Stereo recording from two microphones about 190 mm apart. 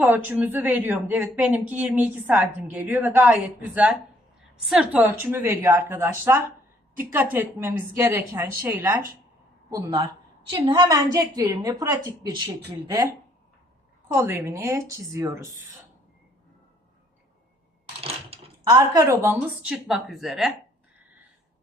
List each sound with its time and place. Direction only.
0.0 s a woman's voice: 10° right (ahead or behind)
18.0 s dishes: 30° right (ahead or behind)
18.8 s a woman's voice: 15° right (ahead or behind); by 20.5 s centre (ahead or behind)